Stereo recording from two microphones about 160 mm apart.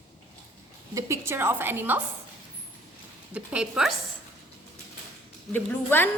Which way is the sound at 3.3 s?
5° right (ahead or behind).